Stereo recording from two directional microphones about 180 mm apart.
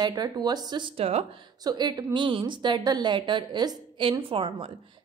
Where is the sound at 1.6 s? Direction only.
25° right (ahead or behind).